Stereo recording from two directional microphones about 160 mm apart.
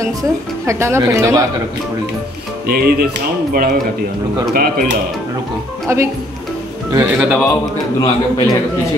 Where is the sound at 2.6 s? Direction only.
75° right (ahead or behind).